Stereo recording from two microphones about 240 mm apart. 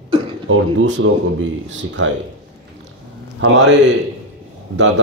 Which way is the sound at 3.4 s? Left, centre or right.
Right.